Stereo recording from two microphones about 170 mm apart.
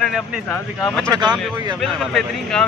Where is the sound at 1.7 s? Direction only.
Centre (ahead or behind).